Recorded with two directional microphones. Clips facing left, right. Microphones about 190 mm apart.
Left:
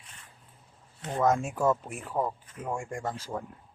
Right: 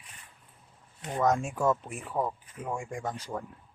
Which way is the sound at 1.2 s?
Centre (ahead or behind).